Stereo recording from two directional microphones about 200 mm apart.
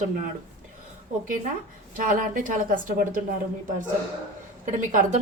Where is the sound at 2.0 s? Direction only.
45° right (ahead or behind).